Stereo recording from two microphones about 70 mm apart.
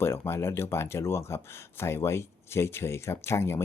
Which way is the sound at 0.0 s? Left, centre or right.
Left.